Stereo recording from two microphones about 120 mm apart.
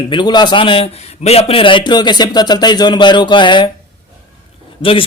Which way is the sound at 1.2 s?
60° left (ahead or behind).